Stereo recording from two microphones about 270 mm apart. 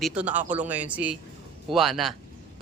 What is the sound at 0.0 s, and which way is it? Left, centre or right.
Speech, centre.